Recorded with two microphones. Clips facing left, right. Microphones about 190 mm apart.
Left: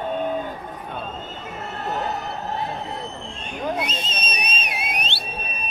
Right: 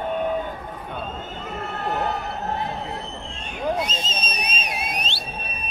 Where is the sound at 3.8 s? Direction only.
60° left (ahead or behind).